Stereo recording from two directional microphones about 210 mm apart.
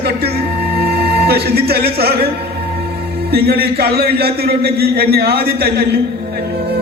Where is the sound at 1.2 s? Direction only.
50° right (ahead or behind).